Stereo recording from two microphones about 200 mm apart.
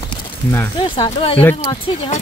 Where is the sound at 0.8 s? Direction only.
25° left (ahead or behind).